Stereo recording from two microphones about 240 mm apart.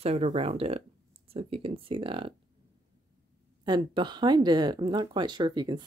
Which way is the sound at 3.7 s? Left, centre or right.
Centre.